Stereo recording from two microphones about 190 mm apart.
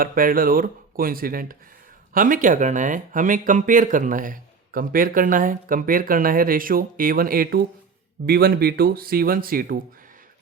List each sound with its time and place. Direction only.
0.0 s speech: 50° right (ahead or behind)